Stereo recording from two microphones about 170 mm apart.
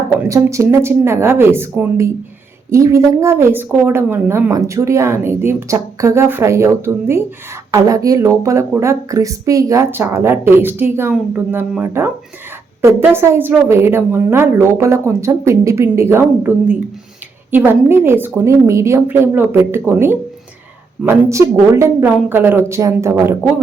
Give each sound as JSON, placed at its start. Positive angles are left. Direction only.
{"t": 0.2, "sound": "a woman's voice", "side_deg": -15}